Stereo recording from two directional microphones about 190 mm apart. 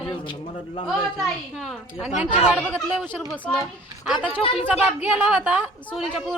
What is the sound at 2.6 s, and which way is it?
A man's voice, 5° left (ahead or behind).